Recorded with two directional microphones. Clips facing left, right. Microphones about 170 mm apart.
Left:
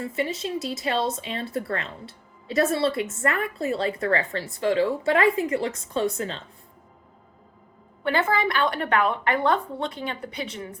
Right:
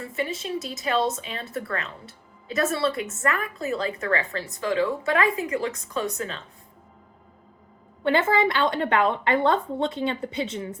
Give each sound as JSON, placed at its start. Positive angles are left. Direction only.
{"t": 0.2, "sound": "a woman's voice", "side_deg": 25}
{"t": 8.0, "sound": "a woman's voice", "side_deg": -25}